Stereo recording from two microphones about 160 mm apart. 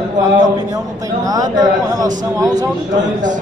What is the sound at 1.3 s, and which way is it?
A man's voice, 25° right (ahead or behind).